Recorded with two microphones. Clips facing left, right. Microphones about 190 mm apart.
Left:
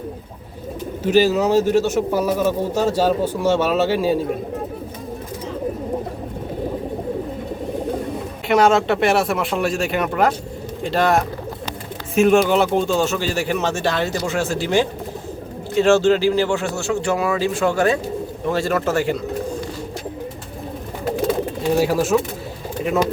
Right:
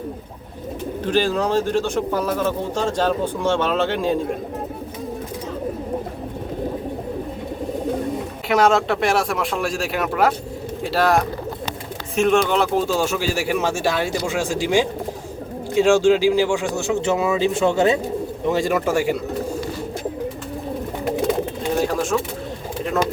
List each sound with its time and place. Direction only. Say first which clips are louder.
1.0 s speech: left 4 dB; 10° left (ahead or behind)
8.4 s speech: left 2 dB; centre (ahead or behind)
21.8 s speech: left 3 dB; 5° left (ahead or behind)